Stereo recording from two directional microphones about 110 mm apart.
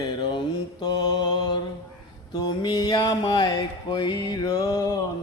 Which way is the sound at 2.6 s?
40° left (ahead or behind).